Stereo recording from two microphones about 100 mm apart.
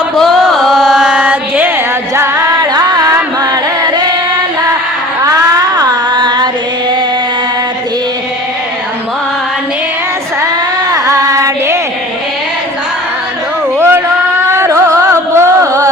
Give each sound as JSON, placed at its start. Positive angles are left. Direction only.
{"t": 0.2, "sound": "chant", "side_deg": 0}
{"t": 2.1, "sound": "music", "side_deg": -30}
{"t": 2.5, "sound": "music", "side_deg": -45}
{"t": 5.2, "sound": "music", "side_deg": -40}
{"t": 10.9, "sound": "child singing", "side_deg": -35}
{"t": 13.7, "sound": "music", "side_deg": -25}